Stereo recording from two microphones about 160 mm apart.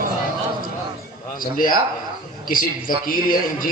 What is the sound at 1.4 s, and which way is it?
A man's voice, 60° left (ahead or behind).